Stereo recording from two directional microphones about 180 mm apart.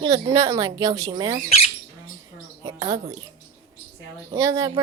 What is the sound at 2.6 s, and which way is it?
Speech, 25° right (ahead or behind).